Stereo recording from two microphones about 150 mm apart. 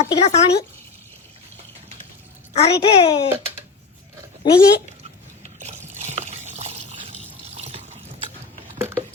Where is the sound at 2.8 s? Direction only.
35° left (ahead or behind).